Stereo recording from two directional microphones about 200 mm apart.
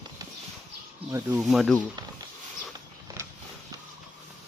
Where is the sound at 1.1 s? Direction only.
10° right (ahead or behind).